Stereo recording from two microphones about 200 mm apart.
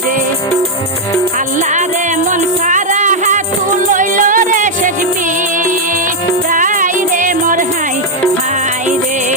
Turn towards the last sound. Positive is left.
turn(degrees=-40)  # may be behind; listen again after turning